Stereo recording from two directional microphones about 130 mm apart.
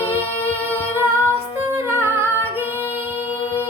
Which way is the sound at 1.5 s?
20° right (ahead or behind).